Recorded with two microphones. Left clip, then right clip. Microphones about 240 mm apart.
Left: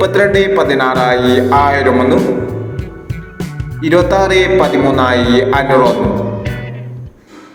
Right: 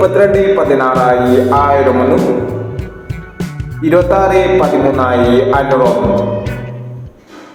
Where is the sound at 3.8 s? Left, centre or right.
Left.